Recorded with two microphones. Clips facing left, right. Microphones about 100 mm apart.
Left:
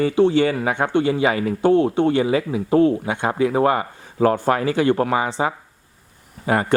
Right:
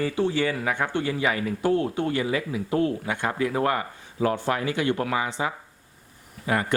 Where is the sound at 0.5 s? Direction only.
25° left (ahead or behind).